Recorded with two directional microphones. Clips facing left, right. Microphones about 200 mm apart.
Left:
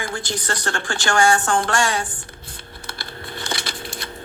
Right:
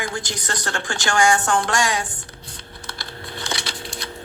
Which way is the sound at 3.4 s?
50° left (ahead or behind).